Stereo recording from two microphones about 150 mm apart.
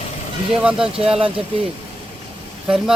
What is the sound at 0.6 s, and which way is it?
Speech, 5° right (ahead or behind).